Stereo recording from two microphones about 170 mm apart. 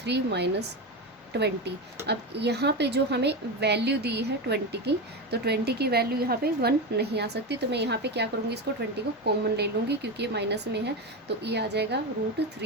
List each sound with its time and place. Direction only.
0.0 s a woman's voice: 80° right